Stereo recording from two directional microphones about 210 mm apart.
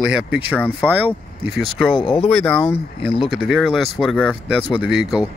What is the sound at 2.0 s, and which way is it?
Speech, 20° left (ahead or behind).